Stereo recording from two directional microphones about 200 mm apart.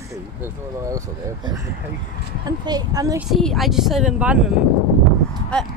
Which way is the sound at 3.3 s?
Centre (ahead or behind).